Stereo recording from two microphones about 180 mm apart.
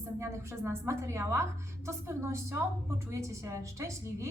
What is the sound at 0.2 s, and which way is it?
A woman's voice, 15° right (ahead or behind).